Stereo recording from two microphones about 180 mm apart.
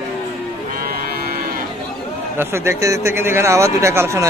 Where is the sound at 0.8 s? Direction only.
55° right (ahead or behind).